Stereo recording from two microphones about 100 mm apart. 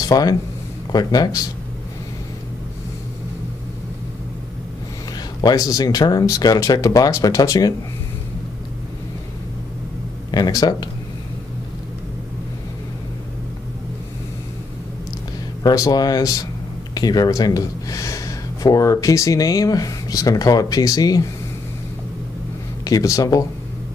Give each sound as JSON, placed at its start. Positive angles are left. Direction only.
{"t": 0.0, "sound": "speech", "side_deg": 40}
{"t": 5.4, "sound": "speech", "side_deg": 40}
{"t": 10.3, "sound": "speech", "side_deg": 40}
{"t": 15.6, "sound": "speech", "side_deg": 35}
{"t": 22.8, "sound": "speech", "side_deg": 35}